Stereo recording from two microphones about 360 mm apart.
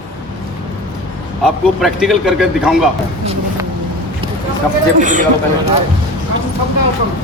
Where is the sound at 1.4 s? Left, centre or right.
Centre.